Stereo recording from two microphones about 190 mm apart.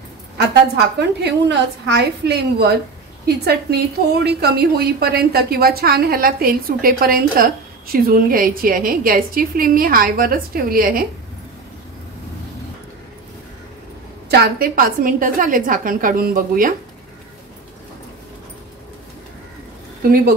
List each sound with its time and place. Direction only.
0.9 s a woman's voice: 60° right (ahead or behind)
14.3 s a woman's voice: 55° right (ahead or behind)